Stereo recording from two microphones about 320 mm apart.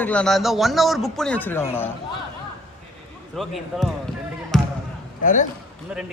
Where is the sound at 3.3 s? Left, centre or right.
Centre.